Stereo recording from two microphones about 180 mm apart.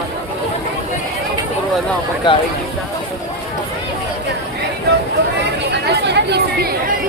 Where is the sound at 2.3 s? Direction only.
25° left (ahead or behind).